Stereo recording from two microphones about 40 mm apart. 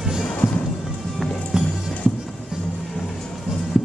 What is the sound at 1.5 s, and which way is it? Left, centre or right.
Music, centre.